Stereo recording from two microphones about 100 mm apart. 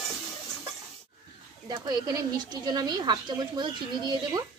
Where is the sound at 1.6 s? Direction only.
45° right (ahead or behind).